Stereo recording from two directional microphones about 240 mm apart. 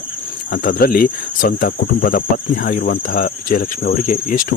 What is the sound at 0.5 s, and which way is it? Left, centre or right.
Speech, left.